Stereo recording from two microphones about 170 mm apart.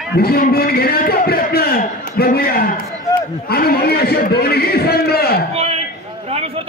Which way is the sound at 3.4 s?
65° left (ahead or behind).